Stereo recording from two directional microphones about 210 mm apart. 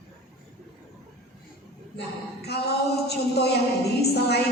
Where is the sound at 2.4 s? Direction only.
50° left (ahead or behind).